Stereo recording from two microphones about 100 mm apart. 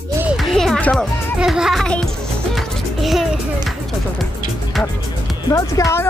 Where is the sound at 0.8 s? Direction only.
10° left (ahead or behind).